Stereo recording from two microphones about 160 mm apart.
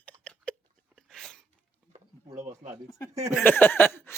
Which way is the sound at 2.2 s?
25° right (ahead or behind).